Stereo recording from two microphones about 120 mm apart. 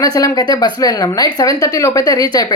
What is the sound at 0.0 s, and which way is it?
Speech, 30° left (ahead or behind).